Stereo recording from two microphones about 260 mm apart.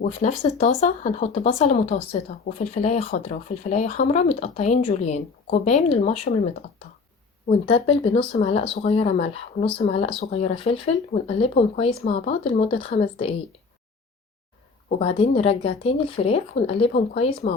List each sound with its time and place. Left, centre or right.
0.0 s speech: left
7.6 s speech: centre
14.9 s speech: left